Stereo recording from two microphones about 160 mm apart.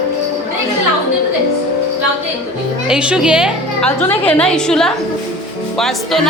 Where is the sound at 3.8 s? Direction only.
5° left (ahead or behind).